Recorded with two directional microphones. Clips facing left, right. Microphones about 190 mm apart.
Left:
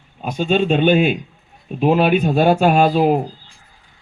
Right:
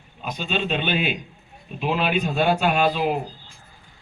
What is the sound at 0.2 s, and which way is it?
Speech, 45° left (ahead or behind).